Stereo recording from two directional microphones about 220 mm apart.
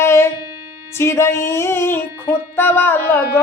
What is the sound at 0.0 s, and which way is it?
Music, 10° left (ahead or behind).